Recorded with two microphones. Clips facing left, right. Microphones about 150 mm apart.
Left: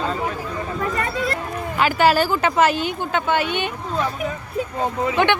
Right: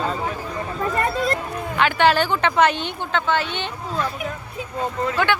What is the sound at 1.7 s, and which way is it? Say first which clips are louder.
Speech: left 1 dB; 5° left (ahead or behind).